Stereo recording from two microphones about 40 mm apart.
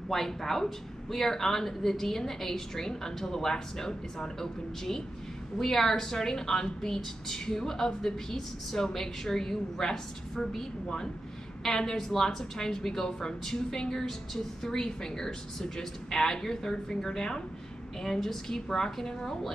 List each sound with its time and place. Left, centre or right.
0.1 s a woman's voice: centre